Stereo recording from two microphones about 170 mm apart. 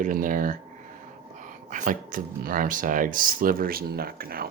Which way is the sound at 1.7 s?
50° right (ahead or behind).